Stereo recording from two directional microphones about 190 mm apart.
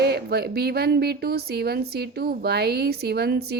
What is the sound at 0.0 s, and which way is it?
Speech, 55° right (ahead or behind).